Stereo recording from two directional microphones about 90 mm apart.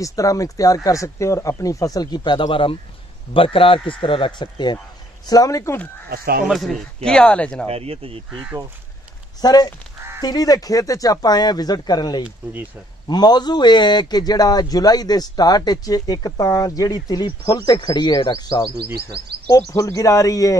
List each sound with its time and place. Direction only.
0.0 s speech: 40° left (ahead or behind); by 4.7 s 55° left (ahead or behind)
5.2 s speech: 45° left (ahead or behind)
6.4 s speech: centre (ahead or behind)
7.1 s speech: 10° left (ahead or behind)
7.6 s speech: 90° right
9.4 s a man's voice: 50° left (ahead or behind)